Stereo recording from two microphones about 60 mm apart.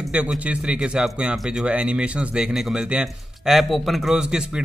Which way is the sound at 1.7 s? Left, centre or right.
Centre.